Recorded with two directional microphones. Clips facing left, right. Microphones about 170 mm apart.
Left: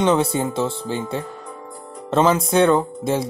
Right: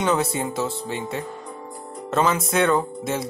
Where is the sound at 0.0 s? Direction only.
25° left (ahead or behind).